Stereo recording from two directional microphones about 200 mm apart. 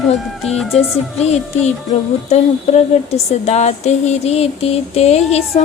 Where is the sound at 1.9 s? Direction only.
35° left (ahead or behind).